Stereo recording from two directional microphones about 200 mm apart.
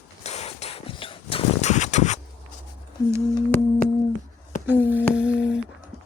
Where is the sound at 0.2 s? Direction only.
35° left (ahead or behind).